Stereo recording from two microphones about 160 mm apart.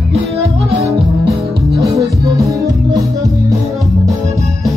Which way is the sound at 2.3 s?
20° right (ahead or behind).